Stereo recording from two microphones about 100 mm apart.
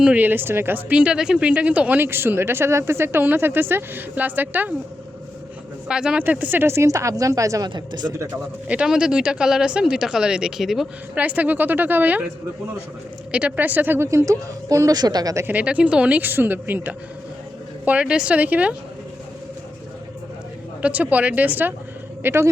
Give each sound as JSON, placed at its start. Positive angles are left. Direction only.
{"t": 0.0, "sound": "speech", "side_deg": -15}
{"t": 5.9, "sound": "speech", "side_deg": -10}
{"t": 7.7, "sound": "speech", "side_deg": -45}
{"t": 8.6, "sound": "speech", "side_deg": -10}
{"t": 11.2, "sound": "speech", "side_deg": -15}
{"t": 13.3, "sound": "speech", "side_deg": -15}
{"t": 15.4, "sound": "speech", "side_deg": -15}
{"t": 20.8, "sound": "speech", "side_deg": -15}